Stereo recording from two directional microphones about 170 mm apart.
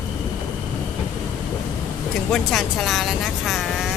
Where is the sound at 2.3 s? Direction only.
Centre (ahead or behind).